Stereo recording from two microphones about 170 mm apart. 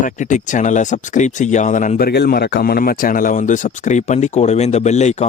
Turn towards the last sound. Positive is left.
turn(degrees=40)  # may be behind; listen again after turning